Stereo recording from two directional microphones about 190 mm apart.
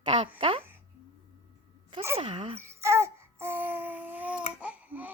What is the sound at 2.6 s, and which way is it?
Babbling, 15° right (ahead or behind).